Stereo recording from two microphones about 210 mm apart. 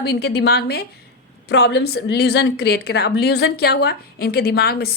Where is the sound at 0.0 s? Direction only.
50° left (ahead or behind).